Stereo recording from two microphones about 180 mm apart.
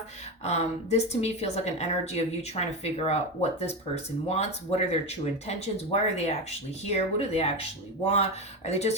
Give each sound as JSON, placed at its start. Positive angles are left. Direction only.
{"t": 0.4, "sound": "a woman's voice", "side_deg": 35}